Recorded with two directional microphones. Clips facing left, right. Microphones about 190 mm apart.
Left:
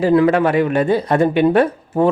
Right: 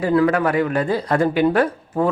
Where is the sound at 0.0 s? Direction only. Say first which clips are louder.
Left 4 dB; 25° left (ahead or behind).